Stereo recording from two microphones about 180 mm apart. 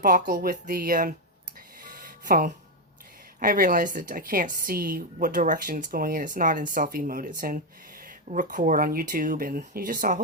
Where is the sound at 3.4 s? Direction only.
50° right (ahead or behind).